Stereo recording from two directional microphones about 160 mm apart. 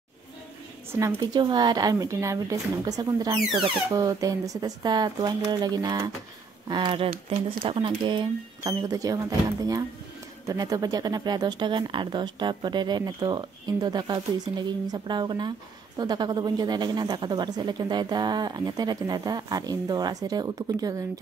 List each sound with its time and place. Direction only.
0.9 s speech: 20° right (ahead or behind)